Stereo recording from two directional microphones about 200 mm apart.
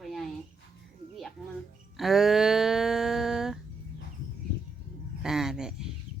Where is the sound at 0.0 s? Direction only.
Centre (ahead or behind).